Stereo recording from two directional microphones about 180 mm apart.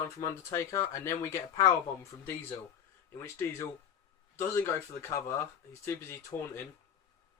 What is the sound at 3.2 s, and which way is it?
Speech, 15° left (ahead or behind).